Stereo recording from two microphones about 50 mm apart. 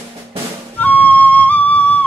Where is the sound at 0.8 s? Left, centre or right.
Left.